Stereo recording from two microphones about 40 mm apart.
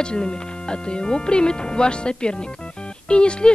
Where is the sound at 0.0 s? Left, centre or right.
Left.